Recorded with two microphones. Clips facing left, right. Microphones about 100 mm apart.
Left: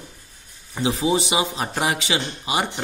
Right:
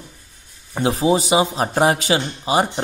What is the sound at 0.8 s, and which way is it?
Speech, 45° right (ahead or behind).